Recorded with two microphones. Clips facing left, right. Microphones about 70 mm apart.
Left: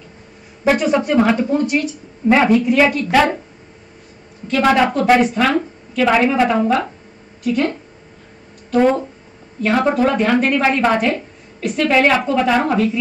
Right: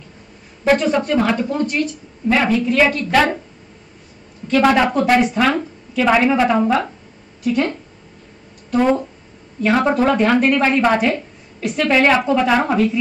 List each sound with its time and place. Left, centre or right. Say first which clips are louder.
0.7 s speech: even; centre
4.5 s a woman's voice: even; centre
8.6 s a sound: left 2 dB; centre
9.6 s a woman's voice: even; centre